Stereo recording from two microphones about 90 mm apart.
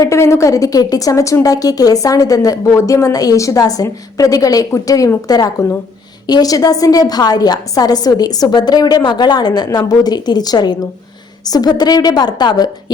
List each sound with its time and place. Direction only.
0.0 s a woman's voice: 30° left (ahead or behind); by 12.7 s 50° left (ahead or behind)